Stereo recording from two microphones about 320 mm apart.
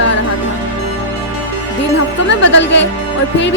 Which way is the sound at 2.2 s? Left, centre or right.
Left.